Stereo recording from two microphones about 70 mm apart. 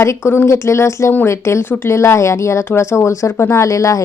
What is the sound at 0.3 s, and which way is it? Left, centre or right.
A woman's voice, left.